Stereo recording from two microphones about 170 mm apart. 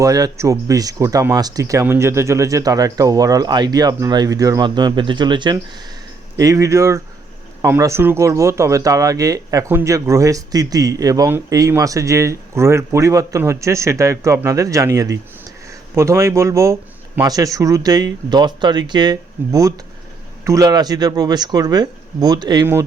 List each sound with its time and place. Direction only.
0.0 s speech: 20° right (ahead or behind)